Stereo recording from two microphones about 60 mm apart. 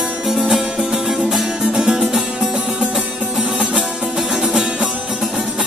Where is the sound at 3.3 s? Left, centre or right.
Centre.